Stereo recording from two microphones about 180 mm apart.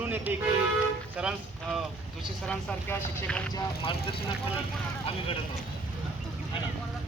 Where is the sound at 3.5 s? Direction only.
30° left (ahead or behind).